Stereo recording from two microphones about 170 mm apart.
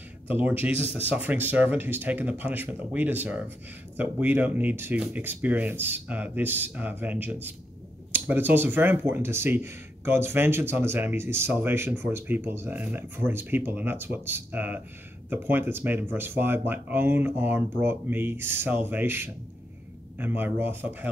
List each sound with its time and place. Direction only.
0.3 s speech: 10° right (ahead or behind)
0.7 s speech: 35° left (ahead or behind)
1.1 s speech: 10° right (ahead or behind)